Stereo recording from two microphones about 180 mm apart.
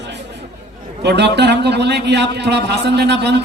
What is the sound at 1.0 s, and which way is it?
A man's voice, 70° right (ahead or behind).